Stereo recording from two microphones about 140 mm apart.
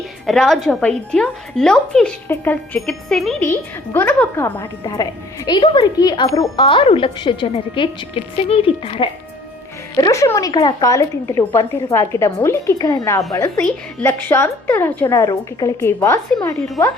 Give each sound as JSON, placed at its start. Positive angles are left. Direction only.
{"t": 0.3, "sound": "a woman's voice", "side_deg": 0}
{"t": 2.2, "sound": "a woman's voice", "side_deg": 15}
{"t": 2.7, "sound": "a woman's voice", "side_deg": 5}
{"t": 3.9, "sound": "a woman's voice", "side_deg": 15}
{"t": 4.8, "sound": "a woman's voice", "side_deg": 30}
{"t": 6.6, "sound": "a woman's voice", "side_deg": 40}
{"t": 9.9, "sound": "a woman's voice", "side_deg": 25}
{"t": 14.0, "sound": "a woman's voice", "side_deg": 15}
{"t": 15.2, "sound": "a woman's voice", "side_deg": 25}